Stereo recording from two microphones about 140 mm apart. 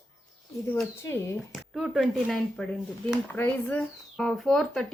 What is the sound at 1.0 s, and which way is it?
Speech, 20° left (ahead or behind).